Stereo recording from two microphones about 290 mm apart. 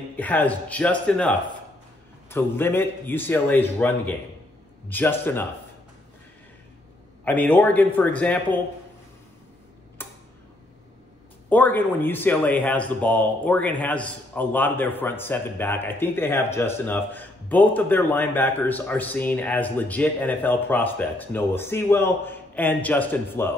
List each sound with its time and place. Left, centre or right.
0.1 s a man's voice: centre
7.2 s a man's voice: centre
10.0 s tick-tock: centre
11.4 s speech: centre